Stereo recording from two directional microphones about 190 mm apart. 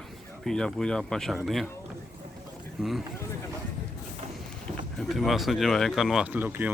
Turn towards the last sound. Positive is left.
turn(degrees=-10)  # may be behind; listen again after turning